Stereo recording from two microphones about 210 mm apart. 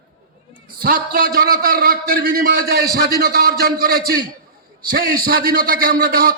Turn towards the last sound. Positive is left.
turn(degrees=-45)  # may be behind; listen again after turning